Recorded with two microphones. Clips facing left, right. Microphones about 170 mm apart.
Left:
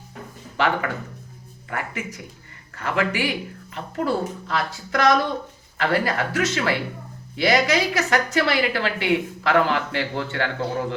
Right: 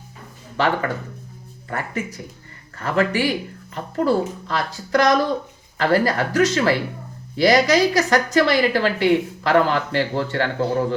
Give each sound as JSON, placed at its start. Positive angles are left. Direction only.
{"t": 0.5, "sound": "a woman's voice", "side_deg": -35}